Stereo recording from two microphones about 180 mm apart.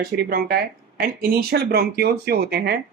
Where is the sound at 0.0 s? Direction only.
55° right (ahead or behind).